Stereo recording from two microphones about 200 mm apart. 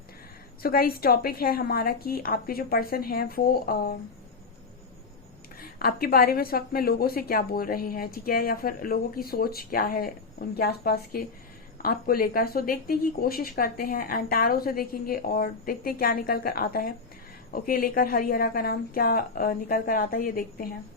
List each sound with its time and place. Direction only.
0.6 s speech: 50° left (ahead or behind)
5.5 s speech: 50° left (ahead or behind)